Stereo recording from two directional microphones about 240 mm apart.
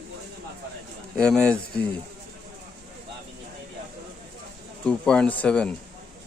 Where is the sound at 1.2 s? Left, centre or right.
Centre.